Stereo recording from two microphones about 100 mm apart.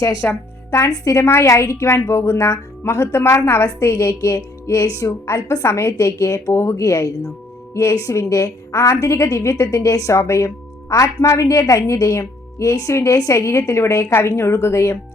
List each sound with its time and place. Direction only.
0.3 s a woman's voice: 25° left (ahead or behind)